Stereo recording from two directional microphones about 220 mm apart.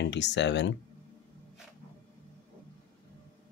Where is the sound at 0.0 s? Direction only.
55° left (ahead or behind).